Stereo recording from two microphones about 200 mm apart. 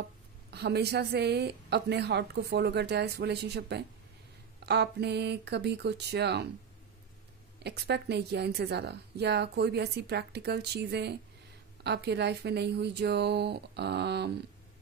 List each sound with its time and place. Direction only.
0.5 s a woman's voice: 55° right (ahead or behind)
7.6 s a woman's voice: 55° right (ahead or behind)